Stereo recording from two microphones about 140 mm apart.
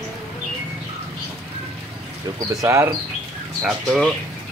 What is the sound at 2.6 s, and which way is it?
Speech, 20° right (ahead or behind).